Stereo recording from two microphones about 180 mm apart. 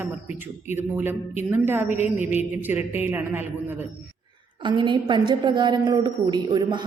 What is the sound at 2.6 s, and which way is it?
A man's voice, 10° right (ahead or behind).